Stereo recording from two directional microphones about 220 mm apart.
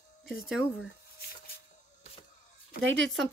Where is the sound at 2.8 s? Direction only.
60° right (ahead or behind).